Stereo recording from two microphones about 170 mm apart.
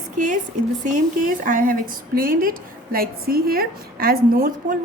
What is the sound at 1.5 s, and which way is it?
A woman's voice, 50° right (ahead or behind).